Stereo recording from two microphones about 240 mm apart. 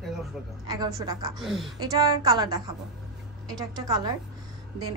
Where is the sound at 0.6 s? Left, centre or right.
Centre.